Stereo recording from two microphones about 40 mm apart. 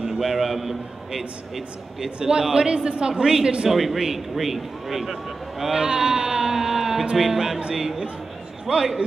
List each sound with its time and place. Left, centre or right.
0.0 s a man's voice: centre
2.1 s a woman's voice: centre
3.7 s a man's voice: centre
8.7 s a woman's voice: right